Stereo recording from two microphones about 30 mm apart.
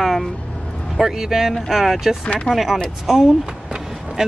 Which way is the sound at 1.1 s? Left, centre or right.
Centre.